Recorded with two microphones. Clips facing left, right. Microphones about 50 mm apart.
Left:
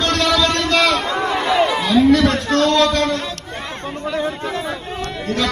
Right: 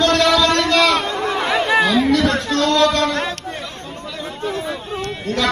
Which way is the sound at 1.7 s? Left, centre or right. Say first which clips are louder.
Right 4 dB; right.